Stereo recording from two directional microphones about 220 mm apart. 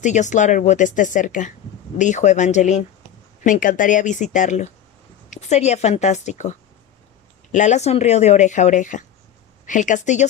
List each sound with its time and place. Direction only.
0.0 s speech: 35° left (ahead or behind)
7.5 s speech: 35° left (ahead or behind)